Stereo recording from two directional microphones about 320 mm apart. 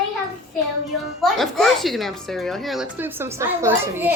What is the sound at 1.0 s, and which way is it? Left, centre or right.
Speech, centre.